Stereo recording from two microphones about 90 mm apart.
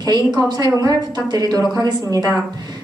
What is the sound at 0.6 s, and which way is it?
A woman's voice, 45° right (ahead or behind).